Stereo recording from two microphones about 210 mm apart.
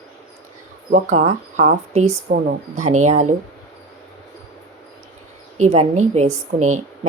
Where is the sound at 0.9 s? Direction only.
35° right (ahead or behind).